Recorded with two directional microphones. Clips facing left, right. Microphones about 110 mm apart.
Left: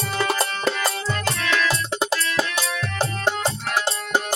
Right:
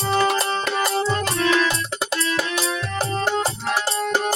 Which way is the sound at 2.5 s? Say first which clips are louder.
Right 2 dB; 30° right (ahead or behind).